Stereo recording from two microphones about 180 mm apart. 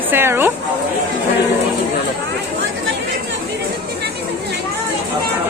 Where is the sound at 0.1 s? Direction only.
10° right (ahead or behind).